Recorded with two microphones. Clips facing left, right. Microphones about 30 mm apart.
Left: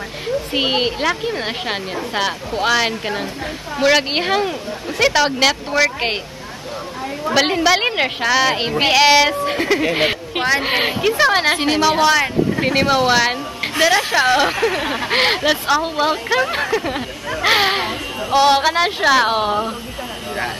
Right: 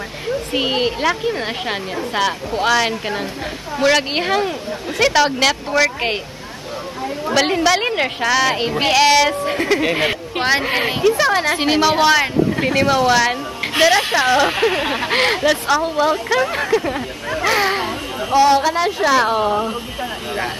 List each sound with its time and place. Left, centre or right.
0.5 s a woman's voice: left
1.0 s a woman's voice: centre
7.2 s speech: centre
8.3 s a woman's voice: centre
8.5 s a woman's voice: centre
11.6 s a woman's voice: centre
12.6 s speech: centre
13.8 s a woman's voice: centre
14.7 s speech: centre
15.1 s speech: centre
15.8 s a woman's voice: left
16.3 s a woman's voice: centre
17.4 s a woman's voice: left